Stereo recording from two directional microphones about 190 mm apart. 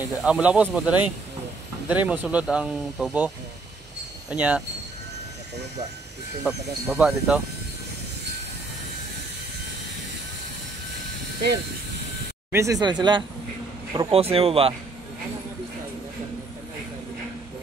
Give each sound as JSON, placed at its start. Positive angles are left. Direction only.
{"t": 0.2, "sound": "speech", "side_deg": -5}
{"t": 4.3, "sound": "speech", "side_deg": -5}
{"t": 6.4, "sound": "speech", "side_deg": 0}
{"t": 12.5, "sound": "speech", "side_deg": -15}